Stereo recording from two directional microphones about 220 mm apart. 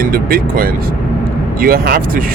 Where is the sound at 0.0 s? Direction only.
40° right (ahead or behind).